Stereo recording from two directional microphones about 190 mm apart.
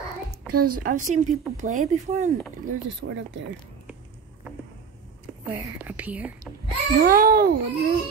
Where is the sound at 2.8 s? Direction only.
70° right (ahead or behind).